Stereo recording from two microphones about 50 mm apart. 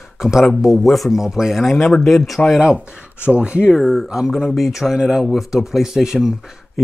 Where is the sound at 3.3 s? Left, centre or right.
Right.